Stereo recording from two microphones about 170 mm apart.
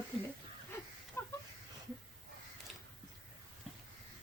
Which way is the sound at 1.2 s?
15° left (ahead or behind).